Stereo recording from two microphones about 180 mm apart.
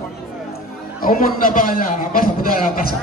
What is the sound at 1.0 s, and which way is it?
A man's voice, 50° left (ahead or behind).